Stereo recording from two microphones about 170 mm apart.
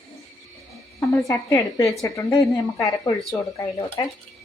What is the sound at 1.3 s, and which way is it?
A woman's voice, 20° left (ahead or behind).